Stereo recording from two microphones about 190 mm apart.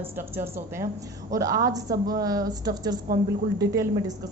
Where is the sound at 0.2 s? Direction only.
10° right (ahead or behind).